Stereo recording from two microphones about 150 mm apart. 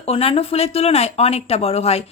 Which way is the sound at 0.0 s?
40° left (ahead or behind).